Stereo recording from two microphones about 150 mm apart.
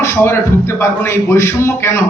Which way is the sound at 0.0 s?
15° left (ahead or behind).